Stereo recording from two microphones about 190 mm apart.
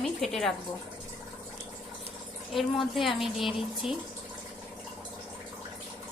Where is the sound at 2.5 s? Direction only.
Centre (ahead or behind).